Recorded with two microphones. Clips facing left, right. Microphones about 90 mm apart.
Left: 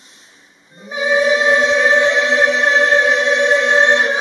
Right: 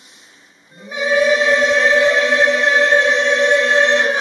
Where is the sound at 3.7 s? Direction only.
20° left (ahead or behind).